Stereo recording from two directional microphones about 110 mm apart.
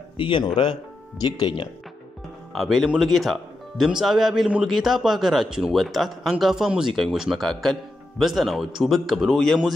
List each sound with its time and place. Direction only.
0.2 s speech: 50° left (ahead or behind)
2.5 s a man's voice: centre (ahead or behind)